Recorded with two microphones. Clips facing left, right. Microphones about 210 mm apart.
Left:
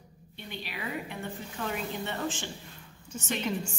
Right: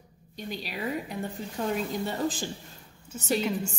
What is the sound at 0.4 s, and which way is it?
A woman's voice, 40° right (ahead or behind).